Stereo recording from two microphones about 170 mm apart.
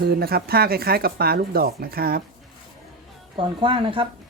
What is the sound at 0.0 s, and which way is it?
Speech, 65° right (ahead or behind).